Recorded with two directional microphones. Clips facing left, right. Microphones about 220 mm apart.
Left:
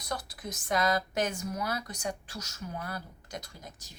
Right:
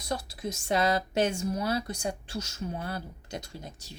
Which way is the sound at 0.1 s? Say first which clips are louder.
Right 4 dB; 25° right (ahead or behind).